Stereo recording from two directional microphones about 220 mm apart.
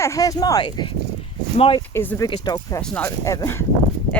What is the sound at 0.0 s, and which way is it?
Speech, 15° left (ahead or behind).